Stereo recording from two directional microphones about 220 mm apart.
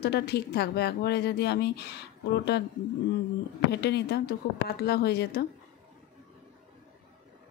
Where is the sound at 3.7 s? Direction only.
50° left (ahead or behind).